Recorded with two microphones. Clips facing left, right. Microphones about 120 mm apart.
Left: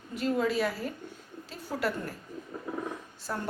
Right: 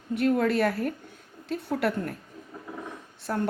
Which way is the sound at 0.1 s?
60° right (ahead or behind).